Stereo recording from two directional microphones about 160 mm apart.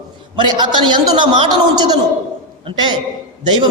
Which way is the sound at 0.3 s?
30° right (ahead or behind).